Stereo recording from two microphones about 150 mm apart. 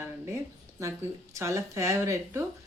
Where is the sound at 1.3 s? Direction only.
20° right (ahead or behind).